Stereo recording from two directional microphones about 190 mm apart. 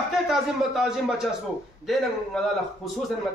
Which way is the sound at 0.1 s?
Centre (ahead or behind).